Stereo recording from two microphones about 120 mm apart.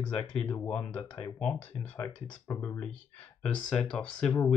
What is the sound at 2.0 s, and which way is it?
Speech, 20° left (ahead or behind).